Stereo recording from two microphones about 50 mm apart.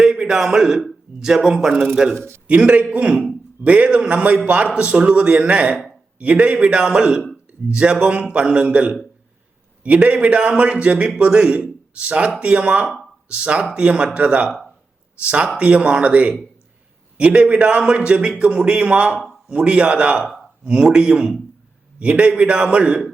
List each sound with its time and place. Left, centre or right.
0.0 s a man's voice: centre
2.5 s a man's voice: right
15.5 s a man's voice: right